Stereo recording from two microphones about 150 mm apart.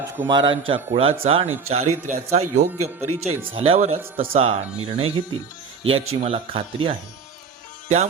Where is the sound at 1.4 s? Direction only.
15° right (ahead or behind).